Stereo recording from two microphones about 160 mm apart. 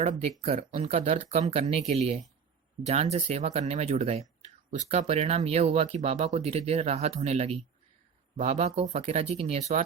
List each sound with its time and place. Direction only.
0.0 s speech: 40° right (ahead or behind)